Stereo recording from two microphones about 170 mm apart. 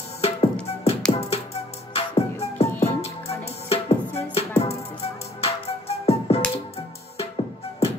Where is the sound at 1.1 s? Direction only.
35° left (ahead or behind).